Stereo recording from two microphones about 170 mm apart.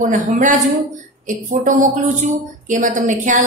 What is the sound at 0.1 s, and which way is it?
A woman's voice, 50° right (ahead or behind).